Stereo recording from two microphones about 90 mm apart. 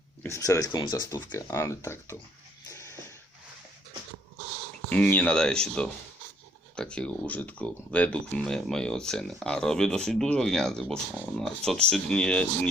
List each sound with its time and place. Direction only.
0.3 s speech: 35° left (ahead or behind); by 1.2 s 50° left (ahead or behind)
1.3 s speech: 30° left (ahead or behind)
4.9 s speech: 15° left (ahead or behind)